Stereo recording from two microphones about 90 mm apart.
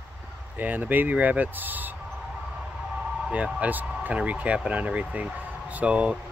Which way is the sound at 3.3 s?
15° right (ahead or behind).